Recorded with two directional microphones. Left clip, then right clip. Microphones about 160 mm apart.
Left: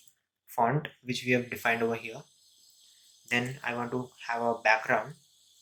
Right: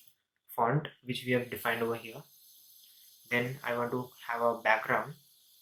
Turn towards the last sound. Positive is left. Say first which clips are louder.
# left 2 dB
turn(degrees=35)  # may be behind; listen again after turning